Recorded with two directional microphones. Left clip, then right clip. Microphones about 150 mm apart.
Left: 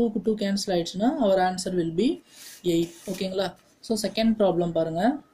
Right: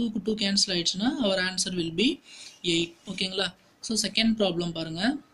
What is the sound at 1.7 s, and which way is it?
Speech, 55° right (ahead or behind).